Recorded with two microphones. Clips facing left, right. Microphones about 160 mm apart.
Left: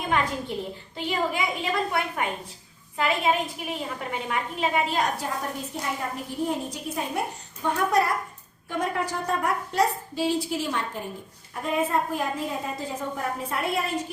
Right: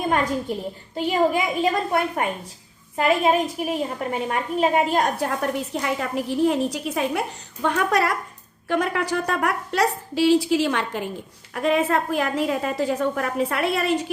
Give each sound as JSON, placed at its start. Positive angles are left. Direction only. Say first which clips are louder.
{"t": 0.5, "sound": "a woman's voice", "louder": "right 4 dB", "side_deg": -45}
{"t": 5.4, "sound": "a woman's voice", "louder": "right 7 dB", "side_deg": -85}